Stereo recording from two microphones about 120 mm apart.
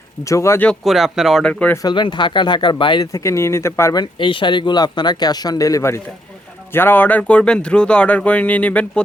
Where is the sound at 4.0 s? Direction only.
45° left (ahead or behind).